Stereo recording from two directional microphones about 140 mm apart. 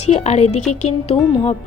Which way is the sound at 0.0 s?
50° left (ahead or behind).